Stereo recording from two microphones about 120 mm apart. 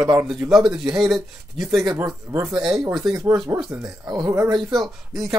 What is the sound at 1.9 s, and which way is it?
Speech, 25° right (ahead or behind).